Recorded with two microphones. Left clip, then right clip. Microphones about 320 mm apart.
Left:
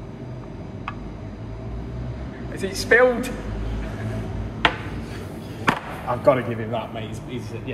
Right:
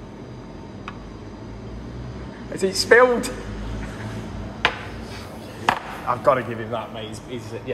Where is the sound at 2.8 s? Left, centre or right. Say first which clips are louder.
Right 2 dB; right.